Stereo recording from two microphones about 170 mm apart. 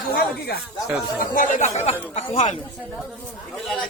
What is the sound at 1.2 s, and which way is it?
Speech, 45° left (ahead or behind).